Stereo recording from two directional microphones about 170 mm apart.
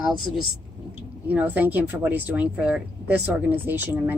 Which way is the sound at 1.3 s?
10° right (ahead or behind).